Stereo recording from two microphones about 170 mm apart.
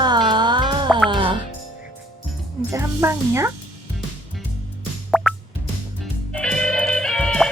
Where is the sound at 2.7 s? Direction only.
15° right (ahead or behind).